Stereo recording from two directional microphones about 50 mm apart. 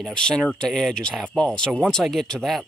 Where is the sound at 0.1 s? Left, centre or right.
Centre.